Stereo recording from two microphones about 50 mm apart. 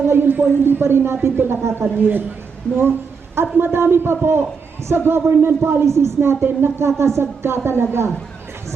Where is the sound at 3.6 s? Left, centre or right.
Right.